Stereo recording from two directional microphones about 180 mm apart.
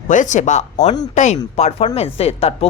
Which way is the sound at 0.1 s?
45° left (ahead or behind).